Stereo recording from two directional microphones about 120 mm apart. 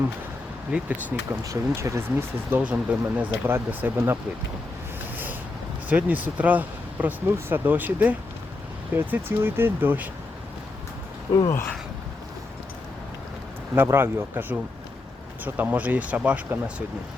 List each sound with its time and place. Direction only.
0.7 s speech: 10° right (ahead or behind)
1.5 s speech: 25° right (ahead or behind)
5.1 s a sound: 15° right (ahead or behind)
5.9 s speech: 15° right (ahead or behind)
11.3 s speech: 30° left (ahead or behind)
13.7 s speech: 20° right (ahead or behind)